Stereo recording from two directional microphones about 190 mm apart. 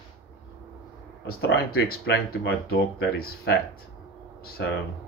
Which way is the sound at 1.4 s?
60° left (ahead or behind).